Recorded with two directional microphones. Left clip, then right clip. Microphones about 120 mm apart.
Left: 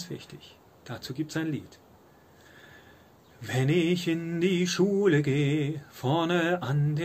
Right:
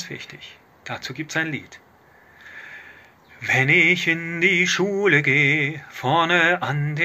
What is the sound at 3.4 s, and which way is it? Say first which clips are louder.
Mantra: right 11 dB; 40° left (ahead or behind).